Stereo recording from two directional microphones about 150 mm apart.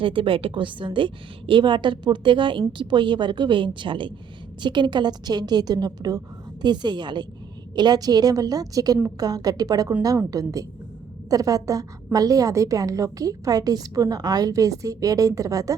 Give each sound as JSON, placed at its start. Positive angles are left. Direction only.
{"t": 0.0, "sound": "a woman's voice", "side_deg": -35}